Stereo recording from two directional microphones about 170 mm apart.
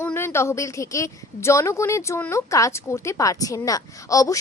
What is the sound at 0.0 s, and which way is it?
A woman's voice, 15° left (ahead or behind).